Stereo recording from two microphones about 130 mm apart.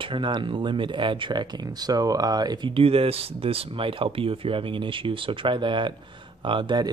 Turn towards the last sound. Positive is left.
turn(degrees=-40)  # may be behind; listen again after turning